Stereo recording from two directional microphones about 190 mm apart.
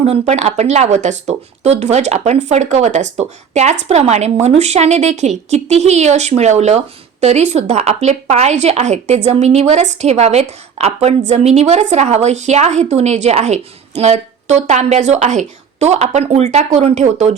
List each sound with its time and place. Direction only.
0.0 s speech: 35° right (ahead or behind)